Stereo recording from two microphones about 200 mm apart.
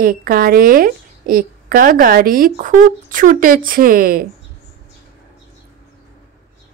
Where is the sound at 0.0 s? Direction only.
45° right (ahead or behind).